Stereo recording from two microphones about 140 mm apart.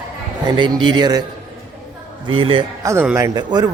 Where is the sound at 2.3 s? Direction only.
40° right (ahead or behind).